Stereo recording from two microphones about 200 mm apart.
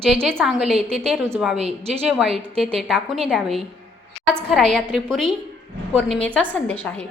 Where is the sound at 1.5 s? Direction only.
30° right (ahead or behind).